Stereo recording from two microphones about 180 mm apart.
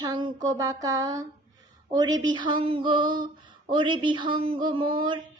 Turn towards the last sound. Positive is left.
turn(degrees=-25)  # may be behind; listen again after turning